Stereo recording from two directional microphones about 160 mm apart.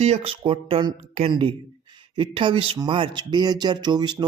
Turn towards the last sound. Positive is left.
turn(degrees=-25)  # may be behind; listen again after turning